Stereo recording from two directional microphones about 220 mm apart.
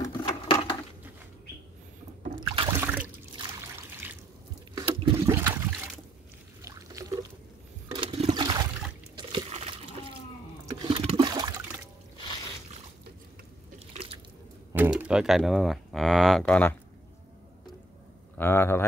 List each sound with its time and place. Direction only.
0.0 s a sound: 20° left (ahead or behind)
2.2 s rowboat: 25° right (ahead or behind)
2.8 s trickle: 5° right (ahead or behind)
4.7 s a sound: 15° right (ahead or behind)
6.6 s pour: 15° right (ahead or behind)
7.9 s toilet flush: 25° right (ahead or behind)
9.1 s liquid: 25° right (ahead or behind)
10.7 s toilet flush: 20° right (ahead or behind)
14.7 s speech: 10° right (ahead or behind)
18.4 s speech: 10° left (ahead or behind)